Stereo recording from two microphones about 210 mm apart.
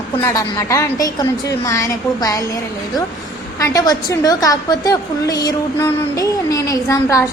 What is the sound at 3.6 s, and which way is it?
A woman's voice, 15° left (ahead or behind).